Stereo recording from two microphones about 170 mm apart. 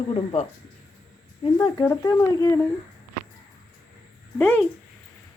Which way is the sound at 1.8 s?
15° left (ahead or behind).